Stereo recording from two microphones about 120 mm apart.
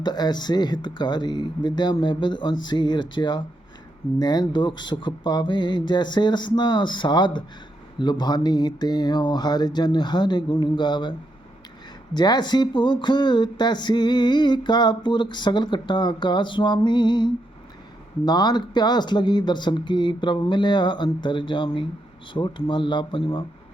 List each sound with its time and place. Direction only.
0.0 s speech: 35° left (ahead or behind)
12.1 s speech: 35° left (ahead or behind)